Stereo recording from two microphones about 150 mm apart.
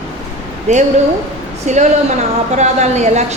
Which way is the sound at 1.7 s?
50° right (ahead or behind).